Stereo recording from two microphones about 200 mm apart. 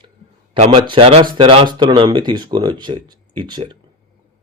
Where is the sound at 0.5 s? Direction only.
30° right (ahead or behind).